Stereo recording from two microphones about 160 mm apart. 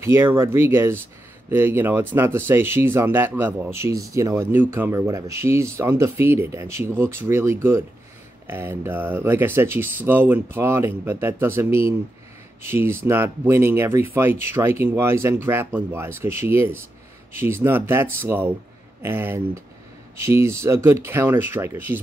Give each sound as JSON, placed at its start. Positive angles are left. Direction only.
{"t": 0.0, "sound": "speech", "side_deg": -15}